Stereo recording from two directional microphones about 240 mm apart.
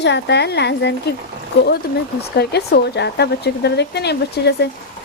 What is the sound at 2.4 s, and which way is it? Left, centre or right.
A woman's voice, left.